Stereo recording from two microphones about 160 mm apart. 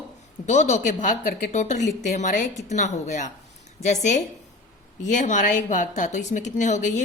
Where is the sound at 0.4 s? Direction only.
45° left (ahead or behind).